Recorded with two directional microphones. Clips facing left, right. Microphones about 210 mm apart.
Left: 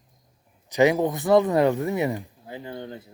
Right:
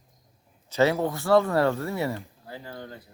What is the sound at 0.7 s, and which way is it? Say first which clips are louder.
Speech: left 3 dB; 15° left (ahead or behind).